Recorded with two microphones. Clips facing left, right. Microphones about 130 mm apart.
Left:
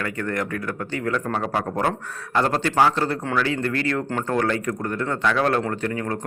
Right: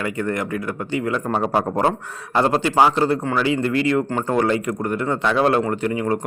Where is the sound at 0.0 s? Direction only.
15° right (ahead or behind).